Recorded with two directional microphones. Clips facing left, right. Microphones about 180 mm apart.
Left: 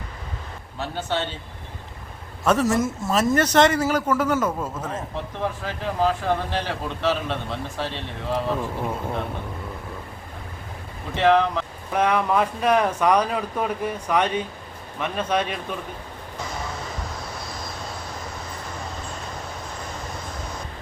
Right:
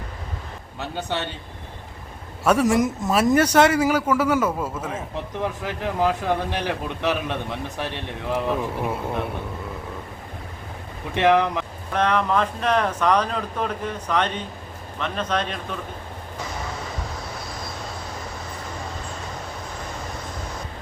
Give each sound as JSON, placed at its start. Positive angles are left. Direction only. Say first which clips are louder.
{"t": 0.8, "sound": "speech", "louder": "left 1 dB", "side_deg": -15}
{"t": 2.4, "sound": "speech", "louder": "right 2 dB", "side_deg": -10}
{"t": 11.1, "sound": "speech", "louder": "even", "side_deg": -15}
{"t": 11.9, "sound": "speech", "louder": "left 1 dB", "side_deg": 10}